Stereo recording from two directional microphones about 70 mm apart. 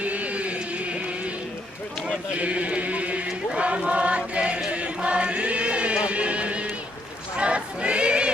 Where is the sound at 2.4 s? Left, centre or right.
Centre.